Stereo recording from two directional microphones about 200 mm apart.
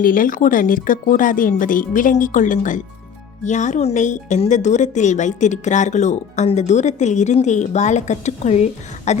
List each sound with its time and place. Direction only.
0.0 s a woman's voice: 45° left (ahead or behind)